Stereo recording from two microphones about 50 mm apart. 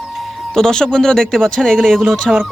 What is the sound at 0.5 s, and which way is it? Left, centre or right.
Speech, centre.